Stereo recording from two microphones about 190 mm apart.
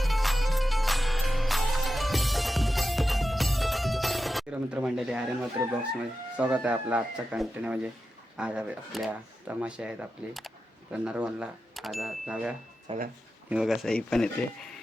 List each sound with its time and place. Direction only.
0.0 s music: centre (ahead or behind)
6.3 s speech: 5° right (ahead or behind)
12.9 s speech: 30° right (ahead or behind)
13.5 s speech: 5° right (ahead or behind)